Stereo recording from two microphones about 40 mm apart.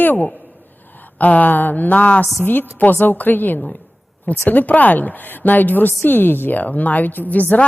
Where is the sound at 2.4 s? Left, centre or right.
Left.